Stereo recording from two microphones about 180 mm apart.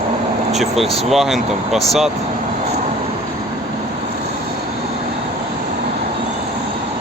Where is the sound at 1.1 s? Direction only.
Centre (ahead or behind).